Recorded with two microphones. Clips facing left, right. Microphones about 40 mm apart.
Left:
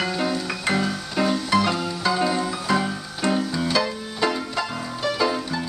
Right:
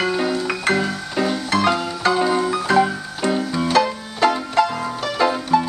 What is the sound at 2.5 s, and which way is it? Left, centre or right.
Music, right.